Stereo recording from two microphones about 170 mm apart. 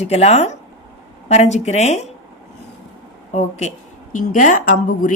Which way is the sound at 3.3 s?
45° left (ahead or behind).